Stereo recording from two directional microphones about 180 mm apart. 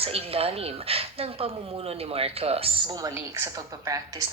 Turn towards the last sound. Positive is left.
turn(degrees=-15)  # may be behind; listen again after turning